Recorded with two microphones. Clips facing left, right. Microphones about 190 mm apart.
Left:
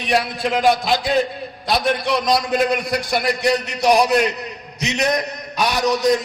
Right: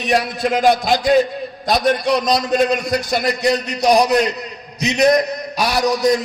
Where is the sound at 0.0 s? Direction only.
45° right (ahead or behind).